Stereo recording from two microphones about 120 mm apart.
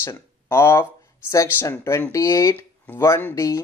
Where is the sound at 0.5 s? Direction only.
20° left (ahead or behind).